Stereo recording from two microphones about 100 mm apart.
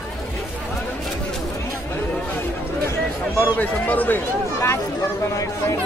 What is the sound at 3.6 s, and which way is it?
Speech, 15° left (ahead or behind).